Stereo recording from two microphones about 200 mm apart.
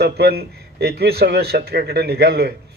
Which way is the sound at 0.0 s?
50° right (ahead or behind).